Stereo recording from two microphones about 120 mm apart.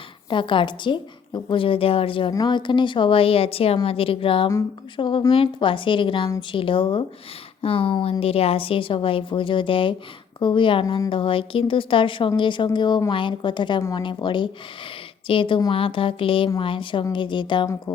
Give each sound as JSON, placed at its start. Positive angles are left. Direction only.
{"t": 0.3, "sound": "a woman's voice", "side_deg": 45}
{"t": 10.8, "sound": "a woman's voice", "side_deg": 30}
{"t": 11.1, "sound": "a woman's voice", "side_deg": 45}